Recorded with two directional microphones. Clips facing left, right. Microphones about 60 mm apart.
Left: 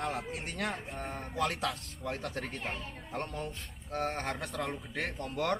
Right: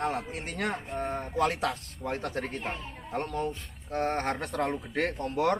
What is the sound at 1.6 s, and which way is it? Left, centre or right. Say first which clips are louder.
Speech: right 4 dB; right.